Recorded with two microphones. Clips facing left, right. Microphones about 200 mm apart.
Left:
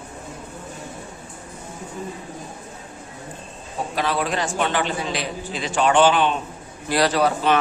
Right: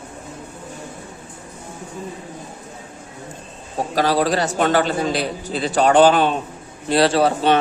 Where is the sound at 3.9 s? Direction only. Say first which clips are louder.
Right 6 dB; 40° right (ahead or behind).